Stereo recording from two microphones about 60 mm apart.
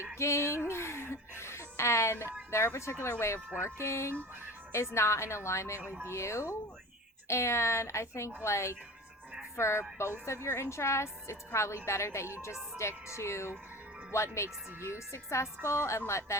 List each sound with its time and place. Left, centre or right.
0.2 s a woman's voice: left